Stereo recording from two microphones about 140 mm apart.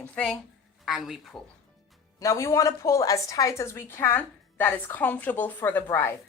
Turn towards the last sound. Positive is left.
turn(degrees=15)  # may be behind; listen again after turning